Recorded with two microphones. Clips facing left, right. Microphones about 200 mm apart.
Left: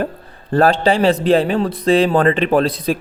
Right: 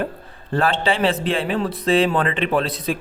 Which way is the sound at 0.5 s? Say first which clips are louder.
Left 6 dB; 40° left (ahead or behind).